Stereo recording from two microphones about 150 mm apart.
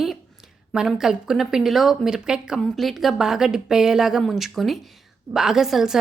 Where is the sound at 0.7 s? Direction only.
5° right (ahead or behind).